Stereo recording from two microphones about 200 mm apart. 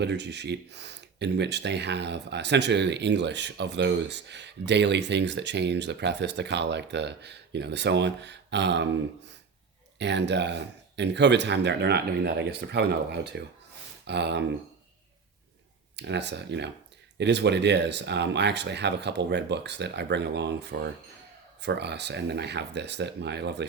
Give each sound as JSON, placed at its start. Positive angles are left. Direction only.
{"t": 0.0, "sound": "speech", "side_deg": -60}
{"t": 10.0, "sound": "speech", "side_deg": -60}
{"t": 16.0, "sound": "speech", "side_deg": -60}